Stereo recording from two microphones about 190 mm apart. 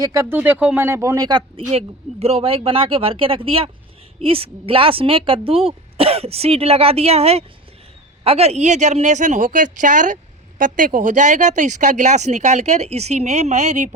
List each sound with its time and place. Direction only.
0.0 s speech: 15° right (ahead or behind); by 13.9 s 40° right (ahead or behind)